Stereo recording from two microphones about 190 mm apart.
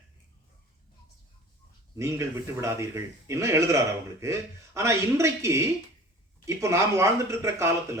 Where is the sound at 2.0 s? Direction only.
15° right (ahead or behind).